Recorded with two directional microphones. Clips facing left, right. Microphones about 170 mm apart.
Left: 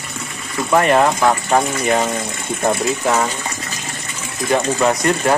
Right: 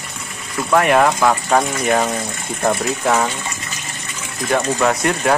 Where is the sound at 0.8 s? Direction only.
Centre (ahead or behind).